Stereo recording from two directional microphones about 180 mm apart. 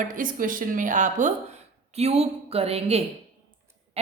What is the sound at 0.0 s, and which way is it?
A woman's voice, 45° right (ahead or behind).